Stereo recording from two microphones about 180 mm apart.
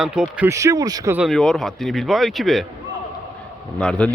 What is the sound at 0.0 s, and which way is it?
Speech, 5° right (ahead or behind).